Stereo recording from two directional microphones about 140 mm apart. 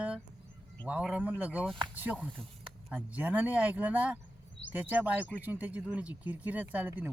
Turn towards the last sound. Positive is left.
turn(degrees=-10)  # may be behind; listen again after turning